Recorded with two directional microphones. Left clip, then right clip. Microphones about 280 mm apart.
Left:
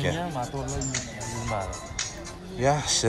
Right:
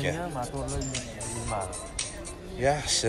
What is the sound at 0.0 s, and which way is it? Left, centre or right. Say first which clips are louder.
Speech: left 2 dB; left.